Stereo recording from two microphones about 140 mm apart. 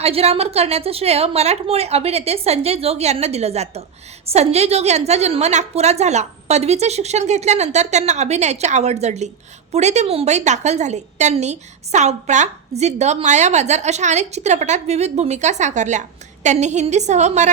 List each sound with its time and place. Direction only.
0.0 s a woman's voice: 45° right (ahead or behind)